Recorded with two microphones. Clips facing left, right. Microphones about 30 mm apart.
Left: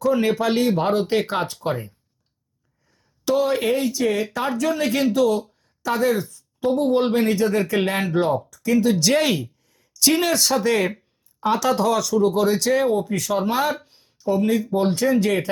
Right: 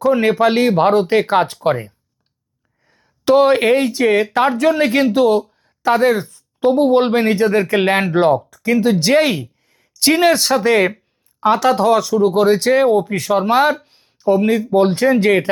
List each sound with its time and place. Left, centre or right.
0.0 s speech: right
2.9 s speech: right
9.6 s a sound: right
10.2 s speech: right
13.8 s a sound: right
14.3 s speech: right